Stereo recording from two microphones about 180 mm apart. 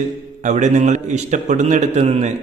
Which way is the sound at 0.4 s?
40° right (ahead or behind).